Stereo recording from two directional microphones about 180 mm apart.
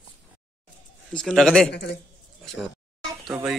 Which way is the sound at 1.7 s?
65° left (ahead or behind).